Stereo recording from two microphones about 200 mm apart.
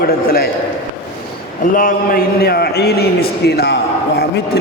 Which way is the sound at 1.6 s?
45° left (ahead or behind).